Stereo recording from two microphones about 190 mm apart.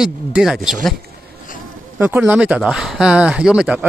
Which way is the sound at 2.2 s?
5° right (ahead or behind).